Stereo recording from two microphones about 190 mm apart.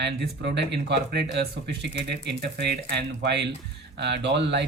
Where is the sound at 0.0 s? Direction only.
65° right (ahead or behind).